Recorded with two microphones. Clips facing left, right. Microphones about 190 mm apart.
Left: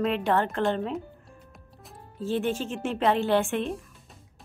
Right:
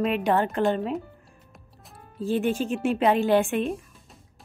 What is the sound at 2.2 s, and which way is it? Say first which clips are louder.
Speech: right 3 dB; 15° right (ahead or behind).